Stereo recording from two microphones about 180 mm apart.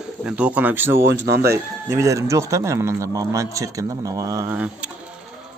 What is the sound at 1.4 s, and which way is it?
Speech, 15° right (ahead or behind).